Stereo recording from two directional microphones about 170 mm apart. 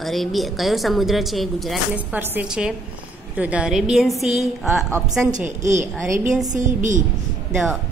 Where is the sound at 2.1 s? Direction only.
10° right (ahead or behind).